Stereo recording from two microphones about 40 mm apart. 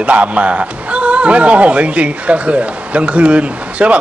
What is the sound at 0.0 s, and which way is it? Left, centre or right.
A man's voice, right.